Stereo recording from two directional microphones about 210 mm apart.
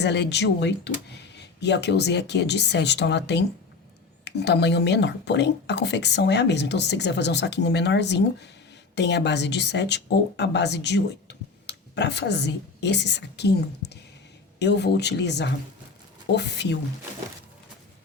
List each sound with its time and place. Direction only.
0.0 s a woman's voice: 55° left (ahead or behind)